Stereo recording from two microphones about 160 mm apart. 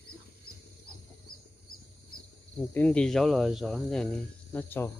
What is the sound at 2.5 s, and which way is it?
Speech, 10° left (ahead or behind).